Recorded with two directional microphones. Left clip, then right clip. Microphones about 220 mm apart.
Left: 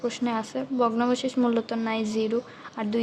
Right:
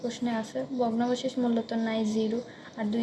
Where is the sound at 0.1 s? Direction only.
40° left (ahead or behind).